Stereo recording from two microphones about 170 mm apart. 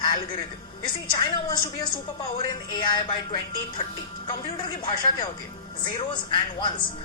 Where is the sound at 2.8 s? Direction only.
25° left (ahead or behind).